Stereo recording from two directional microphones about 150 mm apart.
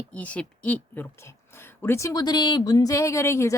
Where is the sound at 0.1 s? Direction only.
10° left (ahead or behind).